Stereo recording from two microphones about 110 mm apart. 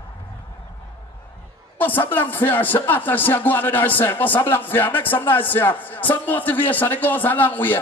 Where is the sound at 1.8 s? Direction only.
15° left (ahead or behind).